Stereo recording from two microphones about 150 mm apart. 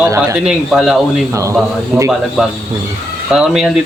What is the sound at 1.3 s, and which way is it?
Speech, 20° right (ahead or behind).